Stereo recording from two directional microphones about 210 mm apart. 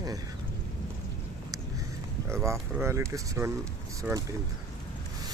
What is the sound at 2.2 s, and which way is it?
Speech, 15° right (ahead or behind).